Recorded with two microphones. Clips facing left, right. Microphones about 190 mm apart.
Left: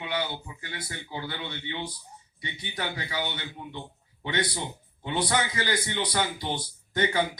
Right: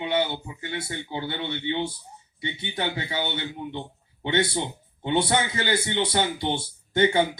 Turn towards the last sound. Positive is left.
turn(degrees=-25)  # may be behind; listen again after turning